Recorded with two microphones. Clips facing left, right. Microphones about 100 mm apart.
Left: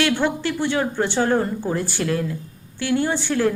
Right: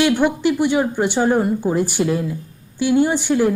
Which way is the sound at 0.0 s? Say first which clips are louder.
Right 5 dB; 15° right (ahead or behind).